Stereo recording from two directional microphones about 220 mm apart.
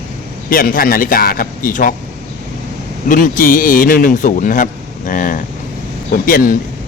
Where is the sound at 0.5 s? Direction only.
40° left (ahead or behind).